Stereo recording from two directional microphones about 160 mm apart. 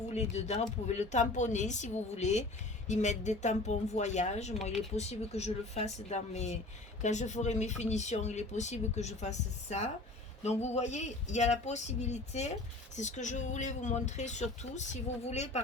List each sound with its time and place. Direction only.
0.1 s speech: 45° left (ahead or behind)